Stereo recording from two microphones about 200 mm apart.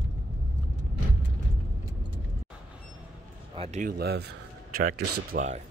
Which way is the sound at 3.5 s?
30° right (ahead or behind).